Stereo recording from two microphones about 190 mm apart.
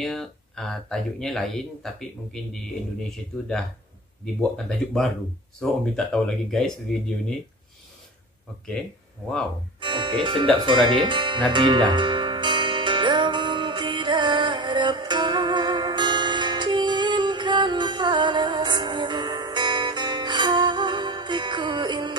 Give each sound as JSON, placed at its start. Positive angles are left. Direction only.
{"t": 0.0, "sound": "speech", "side_deg": 0}
{"t": 9.8, "sound": "music", "side_deg": -25}